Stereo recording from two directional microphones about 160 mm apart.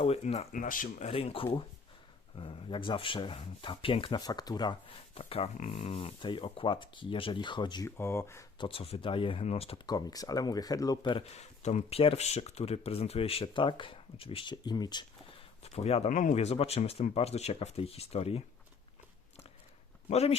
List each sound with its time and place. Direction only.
0.0 s speech: 40° left (ahead or behind)
7.9 s speech: 15° left (ahead or behind)
8.5 s speech: 35° left (ahead or behind)
11.3 s speech: 45° left (ahead or behind); by 15.4 s 25° left (ahead or behind)
15.6 s speech: 40° left (ahead or behind)
20.1 s speech: 40° left (ahead or behind)